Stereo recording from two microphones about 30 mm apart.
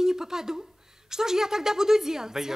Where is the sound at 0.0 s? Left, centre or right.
Centre.